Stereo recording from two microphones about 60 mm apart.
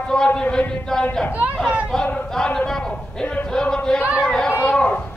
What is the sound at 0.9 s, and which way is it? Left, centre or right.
Speech, centre.